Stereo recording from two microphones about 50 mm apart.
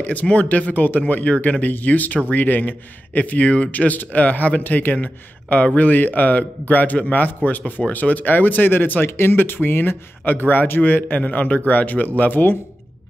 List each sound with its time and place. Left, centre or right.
0.0 s speech: left